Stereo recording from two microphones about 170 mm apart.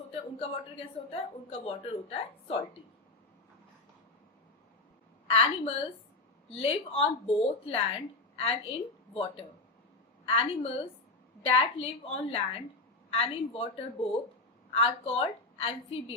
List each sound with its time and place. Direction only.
1.1 s a woman's voice: 35° left (ahead or behind)
5.3 s a woman's voice: 35° left (ahead or behind)